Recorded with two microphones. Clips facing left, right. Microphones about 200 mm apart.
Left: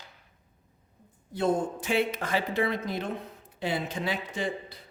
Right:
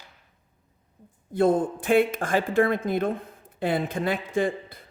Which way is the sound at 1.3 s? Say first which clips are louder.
Right 5 dB; 55° right (ahead or behind).